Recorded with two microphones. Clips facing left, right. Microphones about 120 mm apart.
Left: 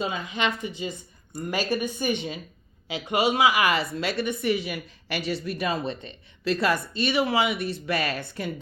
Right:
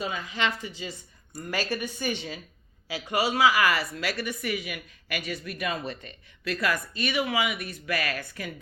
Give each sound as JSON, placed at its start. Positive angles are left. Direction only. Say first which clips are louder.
{"t": 0.0, "sound": "a woman's voice", "louder": "left 2 dB", "side_deg": 20}